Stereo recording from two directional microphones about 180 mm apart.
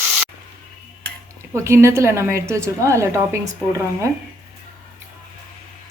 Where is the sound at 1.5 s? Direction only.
15° right (ahead or behind).